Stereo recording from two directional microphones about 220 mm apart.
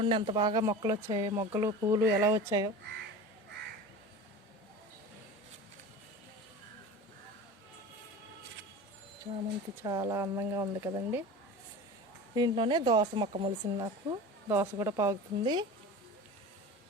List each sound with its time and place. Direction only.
0.0 s speech: 25° right (ahead or behind)
9.8 s speech: 15° right (ahead or behind)
12.3 s speech: 20° right (ahead or behind)